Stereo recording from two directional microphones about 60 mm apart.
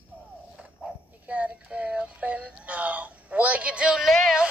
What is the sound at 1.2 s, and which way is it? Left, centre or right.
Synthetic singing, centre.